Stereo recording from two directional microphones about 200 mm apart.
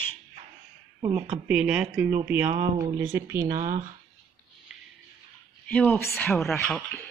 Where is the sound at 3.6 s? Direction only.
40° right (ahead or behind).